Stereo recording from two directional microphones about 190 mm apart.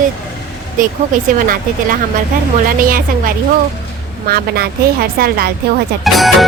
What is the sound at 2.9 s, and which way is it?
Speech, 50° right (ahead or behind).